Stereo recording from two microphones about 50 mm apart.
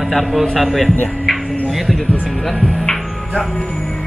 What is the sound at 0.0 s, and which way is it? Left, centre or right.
Speech, centre.